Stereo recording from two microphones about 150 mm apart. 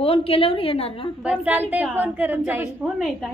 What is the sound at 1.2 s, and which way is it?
A woman's voice, 10° right (ahead or behind).